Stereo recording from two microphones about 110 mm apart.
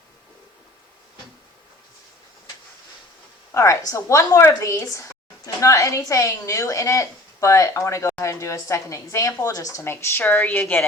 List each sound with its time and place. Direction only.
3.5 s speech: 30° left (ahead or behind)